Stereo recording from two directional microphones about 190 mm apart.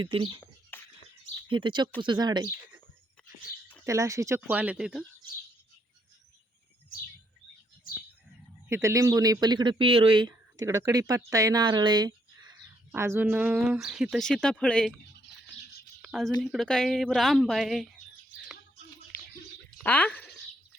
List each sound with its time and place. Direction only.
0.0 s speech: 25° right (ahead or behind)
0.7 s a sound: 10° left (ahead or behind)
1.5 s speech: 25° right (ahead or behind)
3.8 s speech: 15° right (ahead or behind)
8.7 s speech: 15° right (ahead or behind)
12.9 s speech: 10° right (ahead or behind); by 14.9 s 5° left (ahead or behind)
16.0 s a sound: centre (ahead or behind)
16.4 s speech: centre (ahead or behind)
19.8 s speech: 10° left (ahead or behind)